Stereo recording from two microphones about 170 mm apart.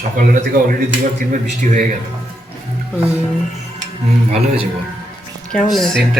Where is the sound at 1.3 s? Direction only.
45° right (ahead or behind).